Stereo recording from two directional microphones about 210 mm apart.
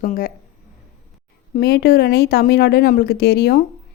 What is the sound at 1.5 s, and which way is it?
Speech, 45° left (ahead or behind).